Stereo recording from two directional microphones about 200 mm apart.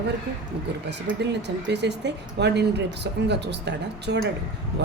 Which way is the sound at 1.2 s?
60° right (ahead or behind).